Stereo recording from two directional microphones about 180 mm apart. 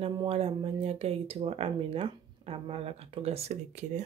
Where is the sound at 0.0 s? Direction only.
30° right (ahead or behind).